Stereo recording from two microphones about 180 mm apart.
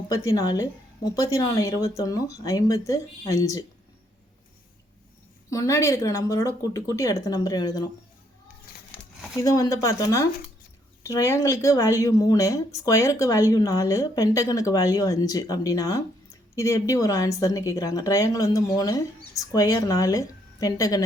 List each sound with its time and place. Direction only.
0.1 s speech: 20° left (ahead or behind)
5.5 s speech: 15° left (ahead or behind)
9.4 s speech: 20° left (ahead or behind)